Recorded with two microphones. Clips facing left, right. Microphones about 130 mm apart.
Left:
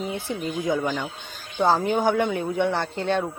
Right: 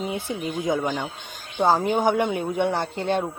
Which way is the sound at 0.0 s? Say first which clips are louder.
Right 1 dB; 15° right (ahead or behind).